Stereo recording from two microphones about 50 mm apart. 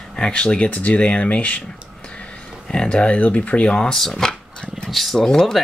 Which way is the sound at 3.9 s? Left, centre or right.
Centre.